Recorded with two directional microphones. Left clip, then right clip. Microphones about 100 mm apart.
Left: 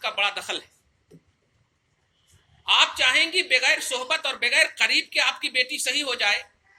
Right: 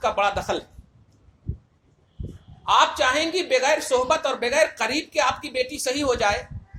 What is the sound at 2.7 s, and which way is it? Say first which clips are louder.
Speech: right 1 dB; 55° right (ahead or behind).